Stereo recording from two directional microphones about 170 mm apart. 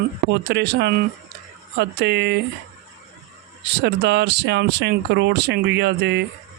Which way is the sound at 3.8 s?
80° right.